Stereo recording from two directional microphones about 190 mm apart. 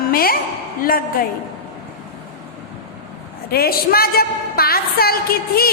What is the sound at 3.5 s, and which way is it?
A woman's voice, 55° left (ahead or behind).